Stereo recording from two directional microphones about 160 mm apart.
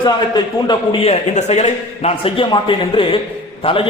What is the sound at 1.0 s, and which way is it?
A man's voice, 40° left (ahead or behind).